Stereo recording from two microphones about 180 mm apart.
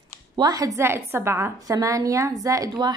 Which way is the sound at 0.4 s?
20° right (ahead or behind).